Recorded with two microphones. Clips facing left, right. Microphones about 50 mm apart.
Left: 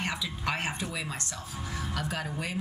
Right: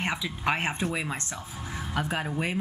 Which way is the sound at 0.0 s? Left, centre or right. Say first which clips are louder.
Right 4 dB; right.